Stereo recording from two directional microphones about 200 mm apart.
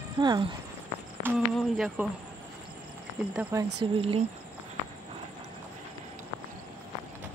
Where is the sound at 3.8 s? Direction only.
25° right (ahead or behind).